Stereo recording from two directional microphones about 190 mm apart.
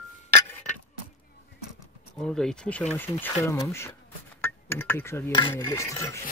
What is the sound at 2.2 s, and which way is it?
Speech, 5° left (ahead or behind).